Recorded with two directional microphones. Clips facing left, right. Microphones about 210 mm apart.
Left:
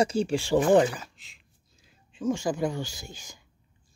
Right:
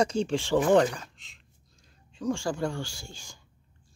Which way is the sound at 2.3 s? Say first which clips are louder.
Left 2 dB; 20° left (ahead or behind).